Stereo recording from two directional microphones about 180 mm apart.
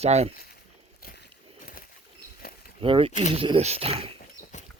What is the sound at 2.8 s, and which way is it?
Speech, 30° right (ahead or behind).